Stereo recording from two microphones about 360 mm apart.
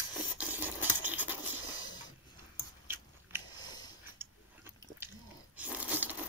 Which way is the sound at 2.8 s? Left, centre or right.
Centre.